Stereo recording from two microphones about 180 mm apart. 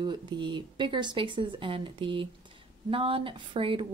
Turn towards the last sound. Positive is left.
turn(degrees=-30)  # may be behind; listen again after turning